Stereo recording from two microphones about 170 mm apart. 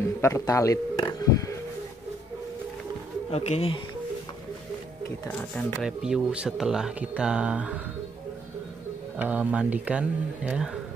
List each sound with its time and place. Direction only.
0.2 s speech: 15° left (ahead or behind)
3.3 s speech: 35° left (ahead or behind)
5.6 s speech: centre (ahead or behind)
9.2 s speech: 10° right (ahead or behind)